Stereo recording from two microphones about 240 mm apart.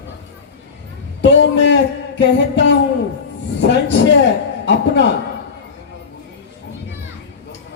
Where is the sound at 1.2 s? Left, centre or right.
Left.